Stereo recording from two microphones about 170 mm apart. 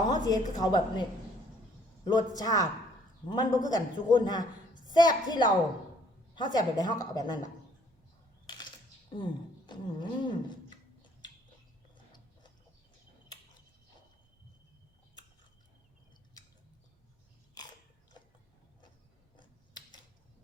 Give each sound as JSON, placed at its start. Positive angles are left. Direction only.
{"t": 0.1, "sound": "a woman's voice", "side_deg": 25}
{"t": 2.0, "sound": "a woman's voice", "side_deg": 25}
{"t": 9.1, "sound": "speech", "side_deg": 30}
{"t": 17.6, "sound": "biting", "side_deg": 20}
{"t": 19.4, "sound": "a sound", "side_deg": 25}